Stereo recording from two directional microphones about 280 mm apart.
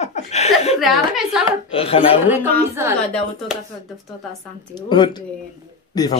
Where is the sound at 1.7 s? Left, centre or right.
Centre.